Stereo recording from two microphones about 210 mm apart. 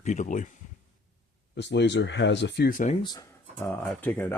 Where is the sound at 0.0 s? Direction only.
35° left (ahead or behind).